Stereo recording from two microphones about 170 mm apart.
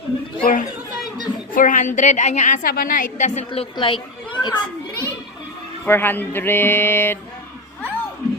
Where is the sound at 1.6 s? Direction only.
50° left (ahead or behind); by 4.6 s 25° left (ahead or behind).